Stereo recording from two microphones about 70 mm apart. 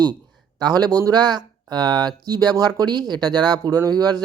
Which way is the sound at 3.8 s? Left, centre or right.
Right.